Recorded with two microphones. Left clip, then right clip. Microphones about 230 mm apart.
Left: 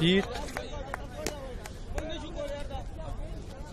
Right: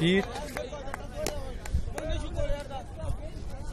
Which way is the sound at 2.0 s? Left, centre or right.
Right.